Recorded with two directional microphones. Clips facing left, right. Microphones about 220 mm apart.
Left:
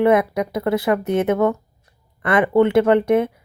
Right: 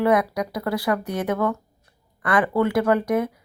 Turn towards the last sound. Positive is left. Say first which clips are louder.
# left 5 dB
turn(degrees=25)  # may be behind; listen again after turning